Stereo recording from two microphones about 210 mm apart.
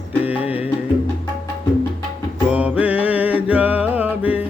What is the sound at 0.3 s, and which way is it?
Music, 5° right (ahead or behind).